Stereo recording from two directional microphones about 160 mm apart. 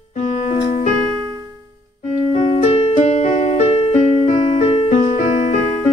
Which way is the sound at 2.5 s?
40° left (ahead or behind).